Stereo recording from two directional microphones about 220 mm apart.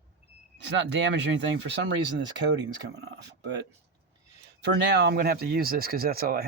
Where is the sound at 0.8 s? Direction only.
55° right (ahead or behind).